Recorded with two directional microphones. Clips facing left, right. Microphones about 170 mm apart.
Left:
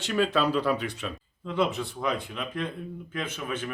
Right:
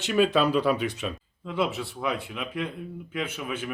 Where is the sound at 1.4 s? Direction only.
5° right (ahead or behind).